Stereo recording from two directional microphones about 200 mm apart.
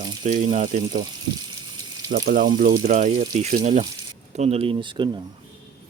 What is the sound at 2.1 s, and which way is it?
Speech, 45° right (ahead or behind).